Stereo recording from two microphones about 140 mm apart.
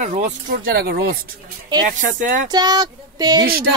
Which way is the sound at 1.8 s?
70° right (ahead or behind).